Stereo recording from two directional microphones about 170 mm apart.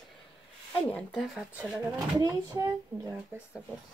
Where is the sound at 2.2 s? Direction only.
20° right (ahead or behind).